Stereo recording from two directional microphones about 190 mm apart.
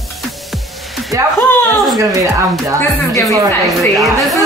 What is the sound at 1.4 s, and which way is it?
Speech, centre (ahead or behind).